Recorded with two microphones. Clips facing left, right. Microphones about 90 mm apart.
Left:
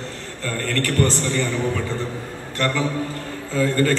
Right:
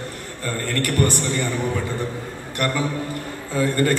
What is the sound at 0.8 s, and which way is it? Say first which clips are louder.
Speech: left 1 dB; 15° right (ahead or behind).